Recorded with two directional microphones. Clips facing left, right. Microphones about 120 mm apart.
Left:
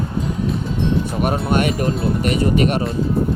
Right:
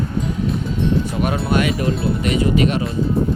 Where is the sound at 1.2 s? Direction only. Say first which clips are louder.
Left 2 dB; 45° left (ahead or behind).